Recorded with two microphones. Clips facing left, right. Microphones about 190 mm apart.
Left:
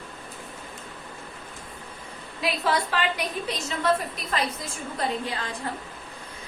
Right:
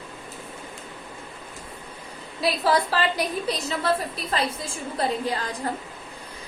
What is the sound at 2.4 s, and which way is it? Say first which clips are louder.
A woman's voice: right 3 dB; 35° right (ahead or behind).